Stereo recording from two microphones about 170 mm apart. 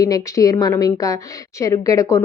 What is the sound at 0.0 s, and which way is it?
A woman's voice, 20° left (ahead or behind).